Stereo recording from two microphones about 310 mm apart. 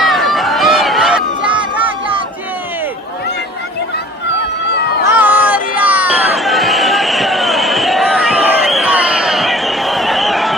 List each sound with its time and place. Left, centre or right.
0.0 s run: centre
1.5 s a sound: centre
5.0 s music: centre